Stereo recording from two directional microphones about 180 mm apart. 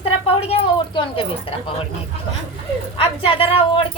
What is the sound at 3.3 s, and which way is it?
Speech, 30° left (ahead or behind).